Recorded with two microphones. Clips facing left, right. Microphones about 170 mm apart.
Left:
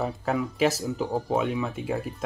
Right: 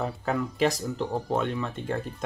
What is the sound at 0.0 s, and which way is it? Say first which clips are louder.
Speech: left 1 dB; centre (ahead or behind).